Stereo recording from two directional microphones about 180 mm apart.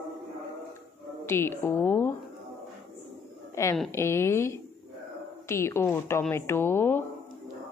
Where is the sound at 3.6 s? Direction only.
15° left (ahead or behind).